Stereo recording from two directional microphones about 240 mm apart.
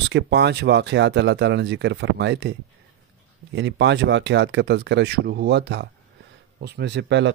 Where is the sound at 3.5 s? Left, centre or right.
Right.